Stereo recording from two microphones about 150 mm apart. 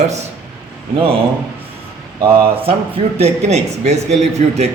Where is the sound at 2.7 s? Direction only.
40° right (ahead or behind).